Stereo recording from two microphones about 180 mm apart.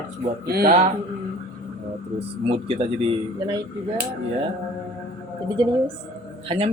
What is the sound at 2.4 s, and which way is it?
Speech, 30° right (ahead or behind).